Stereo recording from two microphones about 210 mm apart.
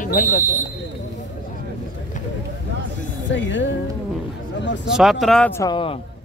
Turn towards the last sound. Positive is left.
turn(degrees=20)  # may be behind; listen again after turning